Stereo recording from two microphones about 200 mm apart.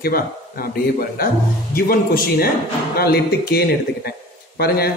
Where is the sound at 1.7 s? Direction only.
50° left (ahead or behind).